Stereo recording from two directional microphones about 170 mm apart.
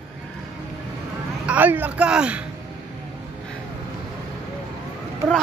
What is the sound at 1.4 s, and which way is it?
Speech, 10° right (ahead or behind).